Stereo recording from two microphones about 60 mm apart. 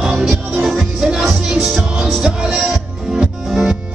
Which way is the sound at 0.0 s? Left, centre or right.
Centre.